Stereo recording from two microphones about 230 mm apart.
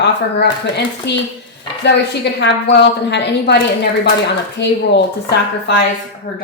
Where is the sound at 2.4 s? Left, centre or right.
Left.